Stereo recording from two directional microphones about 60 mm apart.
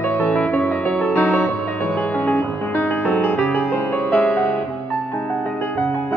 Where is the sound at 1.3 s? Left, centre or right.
Left.